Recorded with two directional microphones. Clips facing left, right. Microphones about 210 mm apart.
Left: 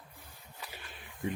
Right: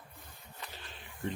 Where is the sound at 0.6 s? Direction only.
10° left (ahead or behind).